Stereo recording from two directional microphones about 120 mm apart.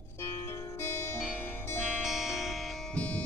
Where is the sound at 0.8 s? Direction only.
20° left (ahead or behind).